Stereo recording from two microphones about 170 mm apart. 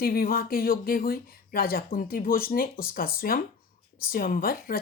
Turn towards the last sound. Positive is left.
turn(degrees=60)  # may be behind; listen again after turning